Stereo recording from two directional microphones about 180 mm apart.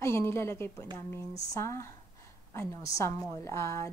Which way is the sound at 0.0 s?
15° left (ahead or behind).